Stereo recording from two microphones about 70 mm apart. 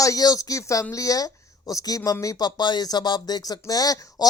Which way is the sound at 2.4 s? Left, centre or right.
Left.